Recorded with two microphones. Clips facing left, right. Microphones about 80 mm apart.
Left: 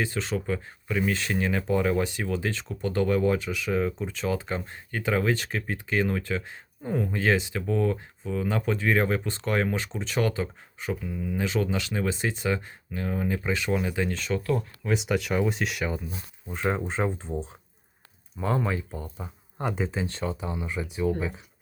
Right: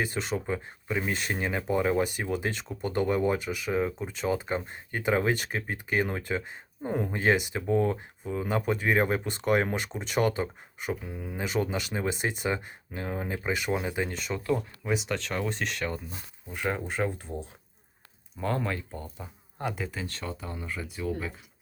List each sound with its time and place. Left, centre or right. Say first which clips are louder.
0.3 s speech: left 2 dB; right
3.4 s speech: left 2 dB; centre
3.7 s speech: left 2 dB; centre
3.9 s speech: left 1 dB; centre; by 10.9 s right
11.0 s speech: left 6 dB; right
11.3 s speech: left 1 dB; right
14.1 s speech: left 2 dB; centre
17.0 s speech: left 1 dB; left
18.3 s speech: left 3 dB; centre
19.1 s speech: left 4 dB; left
20.5 s speech: left 5 dB; centre